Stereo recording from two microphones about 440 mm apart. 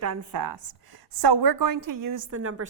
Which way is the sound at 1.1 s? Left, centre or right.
Right.